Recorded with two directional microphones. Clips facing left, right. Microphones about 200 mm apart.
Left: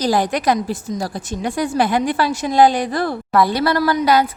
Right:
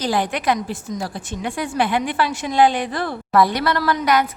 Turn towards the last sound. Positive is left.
turn(degrees=30)  # may be behind; listen again after turning